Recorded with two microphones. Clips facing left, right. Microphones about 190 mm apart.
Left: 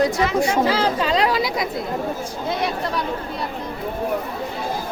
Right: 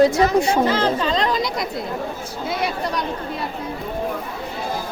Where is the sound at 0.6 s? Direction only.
10° left (ahead or behind).